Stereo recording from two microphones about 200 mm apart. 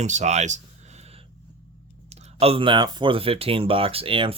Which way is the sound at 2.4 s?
25° right (ahead or behind).